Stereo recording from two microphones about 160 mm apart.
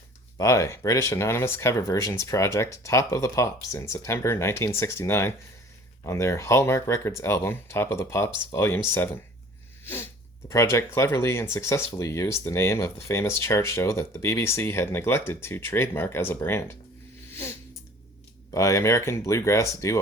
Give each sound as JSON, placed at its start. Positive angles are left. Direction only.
{"t": 0.3, "sound": "speech", "side_deg": 20}
{"t": 9.8, "sound": "sneeze", "side_deg": 15}
{"t": 10.5, "sound": "speech", "side_deg": 15}
{"t": 17.3, "sound": "a sound", "side_deg": 15}
{"t": 18.5, "sound": "speech", "side_deg": 20}